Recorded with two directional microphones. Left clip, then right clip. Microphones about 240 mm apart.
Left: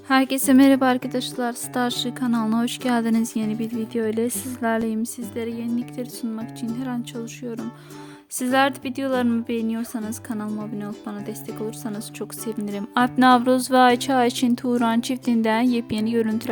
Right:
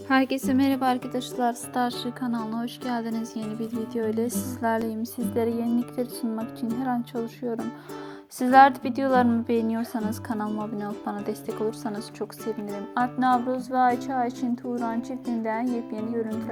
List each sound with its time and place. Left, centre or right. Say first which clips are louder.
0.1 s a woman's voice: left 5 dB; left
1.1 s speech: left 1 dB; centre
5.3 s speech: right 4 dB; centre
8.4 s speech: right 4 dB; centre
12.9 s speech: left 6 dB; left
13.5 s a woman's voice: left 9 dB; left
13.7 s speech: left 5 dB; left